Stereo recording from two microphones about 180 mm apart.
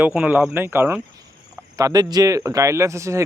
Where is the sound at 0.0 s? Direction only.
10° right (ahead or behind).